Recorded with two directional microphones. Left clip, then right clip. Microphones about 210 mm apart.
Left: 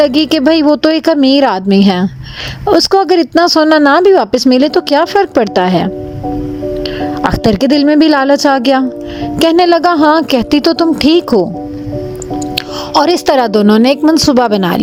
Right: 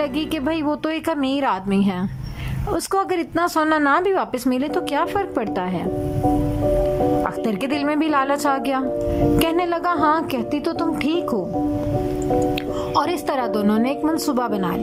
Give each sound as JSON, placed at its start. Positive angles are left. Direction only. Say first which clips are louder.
{"t": 0.0, "sound": "speech", "louder": "left 14 dB", "side_deg": 35}
{"t": 7.3, "sound": "speech", "louder": "left 12 dB", "side_deg": 35}
{"t": 12.9, "sound": "speech", "louder": "left 13 dB", "side_deg": 35}